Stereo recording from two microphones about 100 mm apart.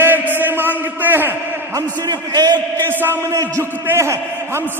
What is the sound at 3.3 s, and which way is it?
A man's voice, 35° right (ahead or behind).